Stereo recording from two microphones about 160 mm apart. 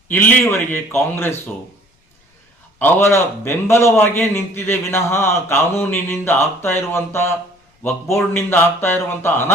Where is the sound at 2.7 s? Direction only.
15° left (ahead or behind).